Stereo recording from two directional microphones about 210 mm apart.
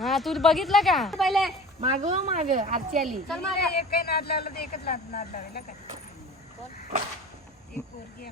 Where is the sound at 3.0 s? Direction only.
Centre (ahead or behind).